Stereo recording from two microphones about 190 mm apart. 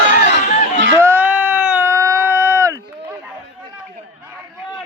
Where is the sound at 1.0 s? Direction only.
10° right (ahead or behind).